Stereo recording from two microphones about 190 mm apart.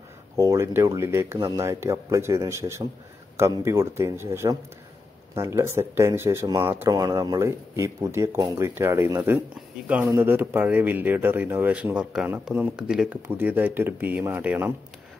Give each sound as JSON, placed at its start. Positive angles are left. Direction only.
{"t": 0.4, "sound": "speech", "side_deg": -15}